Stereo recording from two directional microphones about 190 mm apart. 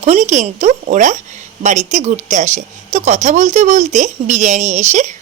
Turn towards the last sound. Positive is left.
turn(degrees=-40)  # may be behind; listen again after turning